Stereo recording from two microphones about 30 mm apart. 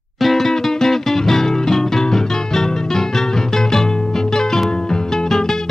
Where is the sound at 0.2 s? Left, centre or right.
Centre.